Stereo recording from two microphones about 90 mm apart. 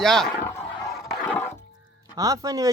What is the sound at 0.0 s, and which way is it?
Speech, 5° left (ahead or behind).